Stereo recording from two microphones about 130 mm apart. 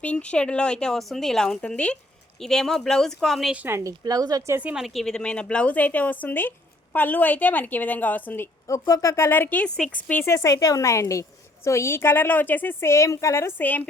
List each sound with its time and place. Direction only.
0.0 s a woman's voice: 10° left (ahead or behind)
3.5 s speech: 15° right (ahead or behind)
4.5 s a woman's voice: 10° right (ahead or behind)
10.1 s a woman's voice: 20° left (ahead or behind)